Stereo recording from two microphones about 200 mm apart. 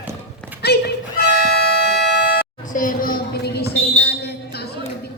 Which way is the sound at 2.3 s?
45° left (ahead or behind).